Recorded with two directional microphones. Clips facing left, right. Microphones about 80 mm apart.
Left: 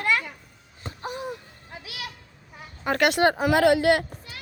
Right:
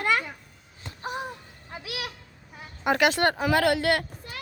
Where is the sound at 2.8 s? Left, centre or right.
Centre.